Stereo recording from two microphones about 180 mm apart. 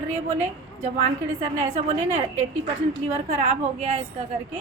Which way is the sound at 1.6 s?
45° right (ahead or behind).